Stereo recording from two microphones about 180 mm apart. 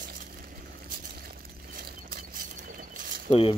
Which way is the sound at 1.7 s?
50° right (ahead or behind).